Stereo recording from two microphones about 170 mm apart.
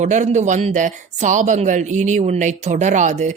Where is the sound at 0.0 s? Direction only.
45° right (ahead or behind).